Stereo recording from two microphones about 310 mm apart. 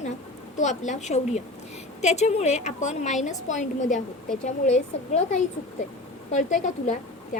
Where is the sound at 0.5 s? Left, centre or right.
Left.